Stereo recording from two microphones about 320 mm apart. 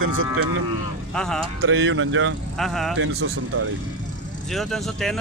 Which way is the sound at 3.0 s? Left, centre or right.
Right.